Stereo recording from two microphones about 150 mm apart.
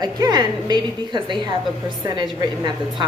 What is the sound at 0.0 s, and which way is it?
A woman's voice, 25° right (ahead or behind).